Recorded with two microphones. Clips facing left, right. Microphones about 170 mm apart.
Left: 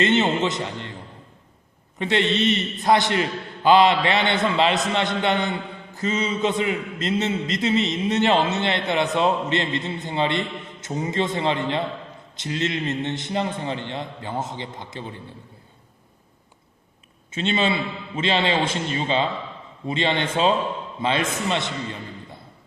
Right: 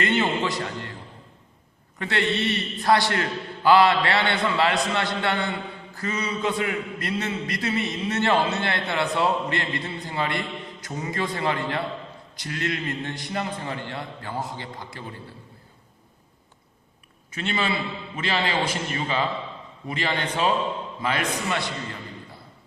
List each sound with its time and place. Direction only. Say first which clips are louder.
0.0 s a man's voice: left 4 dB; 20° left (ahead or behind)
2.0 s a man's voice: left 4 dB; 20° left (ahead or behind)
17.3 s a man's voice: left 4 dB; 25° left (ahead or behind)